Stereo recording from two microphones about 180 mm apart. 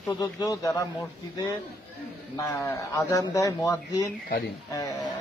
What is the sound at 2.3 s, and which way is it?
A man's voice, 20° left (ahead or behind).